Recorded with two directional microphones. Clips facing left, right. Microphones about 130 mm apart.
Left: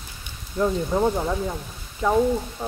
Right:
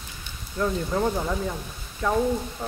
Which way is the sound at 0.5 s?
20° left (ahead or behind).